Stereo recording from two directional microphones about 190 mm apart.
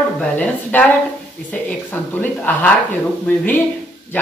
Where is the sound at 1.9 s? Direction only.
10° left (ahead or behind).